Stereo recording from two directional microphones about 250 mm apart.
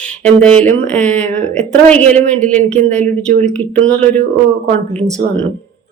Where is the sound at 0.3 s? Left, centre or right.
Centre.